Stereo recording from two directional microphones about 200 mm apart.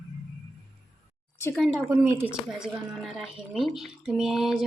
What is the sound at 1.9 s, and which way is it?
Speech, 10° right (ahead or behind).